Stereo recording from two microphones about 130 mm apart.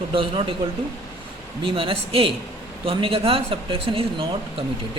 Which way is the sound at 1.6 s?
40° right (ahead or behind).